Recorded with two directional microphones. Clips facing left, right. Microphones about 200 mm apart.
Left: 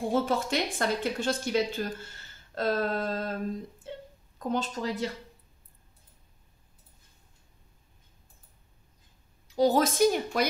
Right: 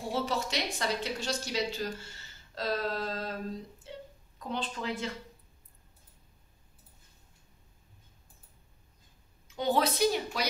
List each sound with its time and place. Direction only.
0.1 s speech: 50° left (ahead or behind)
3.9 s wail: 50° left (ahead or behind)
4.4 s a woman's voice: 45° left (ahead or behind)
9.5 s speech: 40° left (ahead or behind)